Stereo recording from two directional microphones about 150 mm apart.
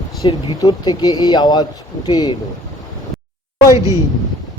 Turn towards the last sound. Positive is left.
turn(degrees=-25)  # may be behind; listen again after turning